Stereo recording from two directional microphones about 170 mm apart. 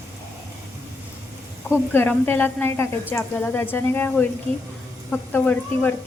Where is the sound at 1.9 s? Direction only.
10° left (ahead or behind).